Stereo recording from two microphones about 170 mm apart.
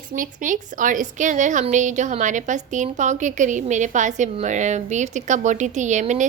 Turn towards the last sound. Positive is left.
turn(degrees=-45)  # may be behind; listen again after turning